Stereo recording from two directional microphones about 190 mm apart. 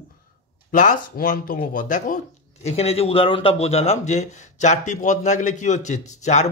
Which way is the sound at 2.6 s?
35° left (ahead or behind).